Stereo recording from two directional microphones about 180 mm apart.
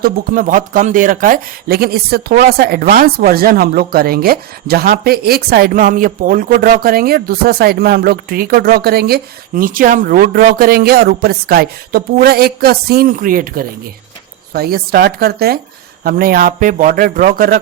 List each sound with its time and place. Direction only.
0.0 s a man's voice: 50° right (ahead or behind)